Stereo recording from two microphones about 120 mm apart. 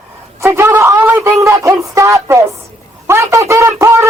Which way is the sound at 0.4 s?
20° right (ahead or behind).